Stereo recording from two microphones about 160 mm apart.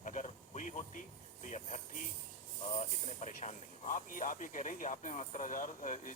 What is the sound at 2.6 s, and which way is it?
Speech, 45° left (ahead or behind).